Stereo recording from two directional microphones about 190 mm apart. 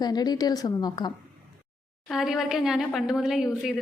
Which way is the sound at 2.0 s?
Centre (ahead or behind).